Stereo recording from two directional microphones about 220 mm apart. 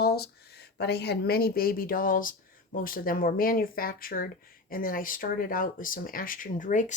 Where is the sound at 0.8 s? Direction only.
50° left (ahead or behind).